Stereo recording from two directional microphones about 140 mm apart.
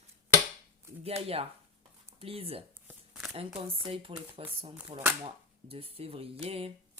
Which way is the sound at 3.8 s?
35° right (ahead or behind).